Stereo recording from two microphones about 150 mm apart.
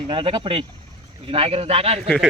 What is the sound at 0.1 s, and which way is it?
A man's voice, 35° right (ahead or behind).